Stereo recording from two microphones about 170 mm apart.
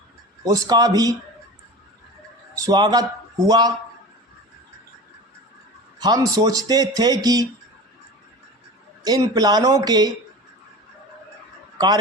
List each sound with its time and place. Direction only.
0.4 s speech: 20° right (ahead or behind)
2.6 s a man's voice: 20° right (ahead or behind)
6.0 s speech: 20° right (ahead or behind)
9.0 s speech: 20° right (ahead or behind)